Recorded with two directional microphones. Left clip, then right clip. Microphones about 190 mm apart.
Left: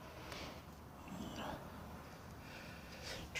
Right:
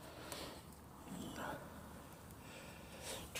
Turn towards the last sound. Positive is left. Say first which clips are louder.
# left 1 dB
turn(degrees=-40)  # may be behind; listen again after turning